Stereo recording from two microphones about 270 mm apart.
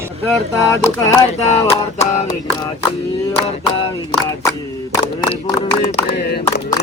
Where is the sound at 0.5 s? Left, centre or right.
Centre.